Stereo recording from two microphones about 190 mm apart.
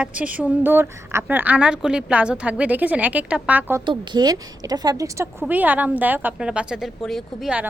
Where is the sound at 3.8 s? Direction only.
25° right (ahead or behind).